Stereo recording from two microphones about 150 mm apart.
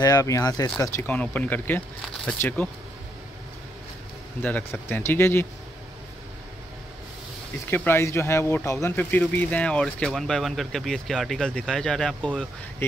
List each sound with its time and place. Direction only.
0.0 s speech: 20° left (ahead or behind)
4.4 s speech: 10° left (ahead or behind)
7.7 s speech: 15° left (ahead or behind)